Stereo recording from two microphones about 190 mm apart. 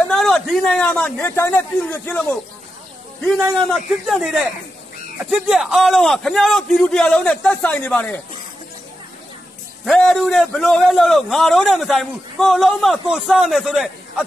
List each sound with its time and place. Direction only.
0.1 s a man's voice: centre (ahead or behind)
3.3 s a man's voice: centre (ahead or behind)
9.8 s a man's voice: centre (ahead or behind)